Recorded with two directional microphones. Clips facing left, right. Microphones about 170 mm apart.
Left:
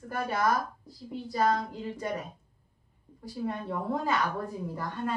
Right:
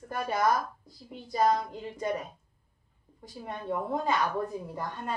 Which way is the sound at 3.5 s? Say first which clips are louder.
Right 1 dB; 20° right (ahead or behind).